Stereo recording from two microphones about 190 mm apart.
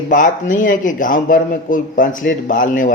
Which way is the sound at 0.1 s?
45° left (ahead or behind).